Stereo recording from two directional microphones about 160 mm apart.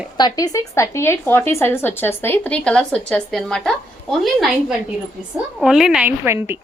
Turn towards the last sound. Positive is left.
turn(degrees=-15)  # may be behind; listen again after turning